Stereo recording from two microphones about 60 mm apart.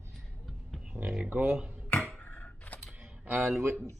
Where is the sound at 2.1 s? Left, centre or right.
Left.